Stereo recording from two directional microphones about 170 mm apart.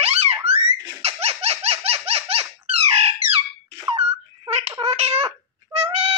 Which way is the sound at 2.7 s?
35° right (ahead or behind).